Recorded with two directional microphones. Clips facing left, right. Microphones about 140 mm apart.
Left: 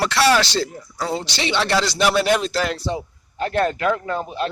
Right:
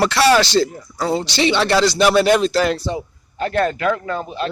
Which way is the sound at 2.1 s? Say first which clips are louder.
Right 5 dB; 10° left (ahead or behind).